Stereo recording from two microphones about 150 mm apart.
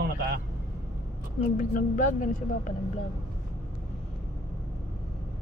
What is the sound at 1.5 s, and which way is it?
A woman's voice, 55° left (ahead or behind).